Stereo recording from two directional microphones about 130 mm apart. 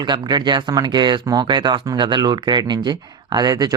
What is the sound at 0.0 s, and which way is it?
Speech, 35° right (ahead or behind).